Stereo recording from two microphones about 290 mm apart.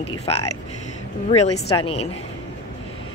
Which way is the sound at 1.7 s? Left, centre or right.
Centre.